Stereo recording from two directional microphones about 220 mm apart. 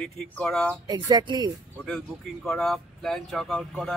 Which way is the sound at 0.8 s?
20° right (ahead or behind).